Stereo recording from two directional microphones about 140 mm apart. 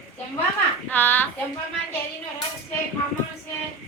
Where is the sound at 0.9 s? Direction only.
15° left (ahead or behind).